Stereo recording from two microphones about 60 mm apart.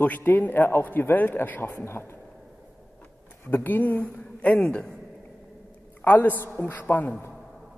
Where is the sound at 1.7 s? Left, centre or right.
Left.